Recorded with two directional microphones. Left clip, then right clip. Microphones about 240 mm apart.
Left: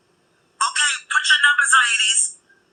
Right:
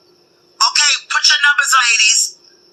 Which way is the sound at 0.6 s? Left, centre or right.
Right.